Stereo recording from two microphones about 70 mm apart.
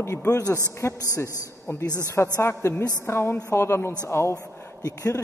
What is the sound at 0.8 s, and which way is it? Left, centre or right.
A man's voice, left.